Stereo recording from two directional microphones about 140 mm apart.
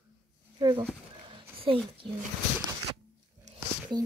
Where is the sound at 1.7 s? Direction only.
40° right (ahead or behind).